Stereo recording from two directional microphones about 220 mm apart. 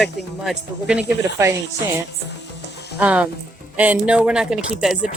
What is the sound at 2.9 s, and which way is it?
A man's voice, 5° right (ahead or behind).